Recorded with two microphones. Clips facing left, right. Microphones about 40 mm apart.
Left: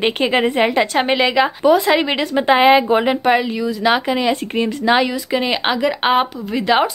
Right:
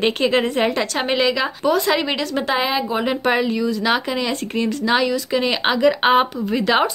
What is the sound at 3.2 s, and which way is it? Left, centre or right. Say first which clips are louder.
A woman's voice: left 2 dB; centre.